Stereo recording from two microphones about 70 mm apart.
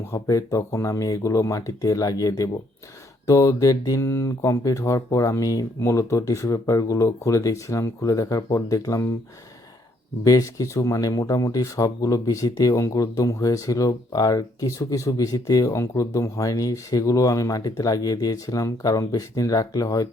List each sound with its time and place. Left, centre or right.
0.1 s speech: left
4.0 s speech: left
10.2 s speech: left